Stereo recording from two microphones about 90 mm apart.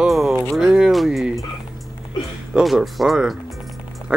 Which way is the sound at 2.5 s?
Centre (ahead or behind).